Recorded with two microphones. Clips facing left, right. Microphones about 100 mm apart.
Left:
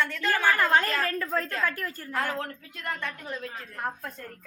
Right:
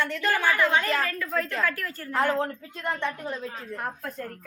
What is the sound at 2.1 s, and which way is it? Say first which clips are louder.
Speech: right 6 dB; 25° right (ahead or behind).